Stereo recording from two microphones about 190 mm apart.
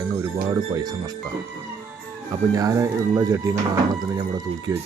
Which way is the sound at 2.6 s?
15° right (ahead or behind).